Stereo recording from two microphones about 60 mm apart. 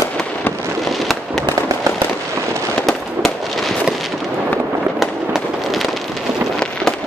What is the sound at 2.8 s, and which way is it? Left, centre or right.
Fireworks, centre.